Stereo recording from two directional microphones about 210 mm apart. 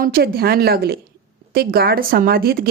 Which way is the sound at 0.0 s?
45° right (ahead or behind).